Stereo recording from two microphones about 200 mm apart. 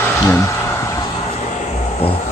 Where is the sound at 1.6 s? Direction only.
30° left (ahead or behind).